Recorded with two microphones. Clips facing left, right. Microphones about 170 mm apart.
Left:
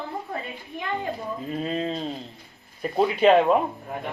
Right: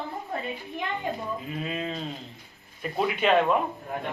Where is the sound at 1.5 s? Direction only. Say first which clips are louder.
Left 7 dB; 35° left (ahead or behind).